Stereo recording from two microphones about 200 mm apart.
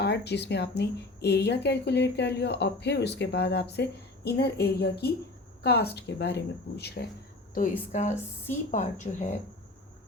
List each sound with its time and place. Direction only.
0.0 s a woman's voice: 55° left (ahead or behind)
7.5 s a woman's voice: 40° left (ahead or behind)